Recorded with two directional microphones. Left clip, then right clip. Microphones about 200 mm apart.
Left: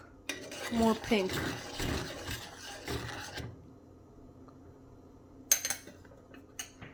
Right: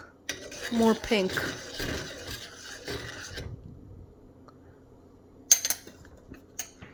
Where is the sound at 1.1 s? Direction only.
25° right (ahead or behind).